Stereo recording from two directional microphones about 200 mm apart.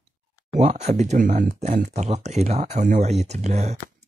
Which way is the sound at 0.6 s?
35° right (ahead or behind).